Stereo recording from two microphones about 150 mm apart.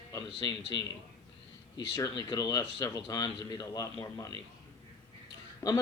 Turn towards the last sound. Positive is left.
turn(degrees=20)  # may be behind; listen again after turning